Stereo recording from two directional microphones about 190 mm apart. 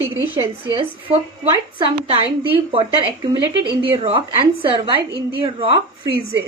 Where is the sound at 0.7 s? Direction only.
25° right (ahead or behind).